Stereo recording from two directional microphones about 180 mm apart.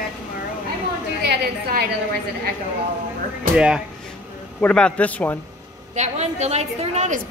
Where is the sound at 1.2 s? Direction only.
60° right (ahead or behind).